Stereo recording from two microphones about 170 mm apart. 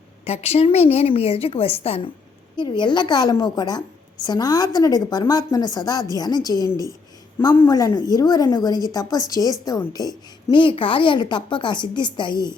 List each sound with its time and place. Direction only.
0.3 s a woman's voice: 35° left (ahead or behind)